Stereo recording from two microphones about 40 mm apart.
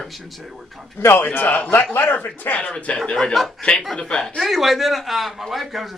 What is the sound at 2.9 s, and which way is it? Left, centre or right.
Speech, left.